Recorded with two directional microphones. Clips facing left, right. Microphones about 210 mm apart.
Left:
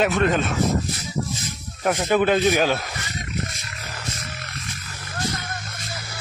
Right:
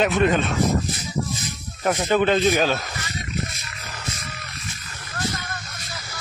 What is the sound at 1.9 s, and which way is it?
Speech, centre (ahead or behind).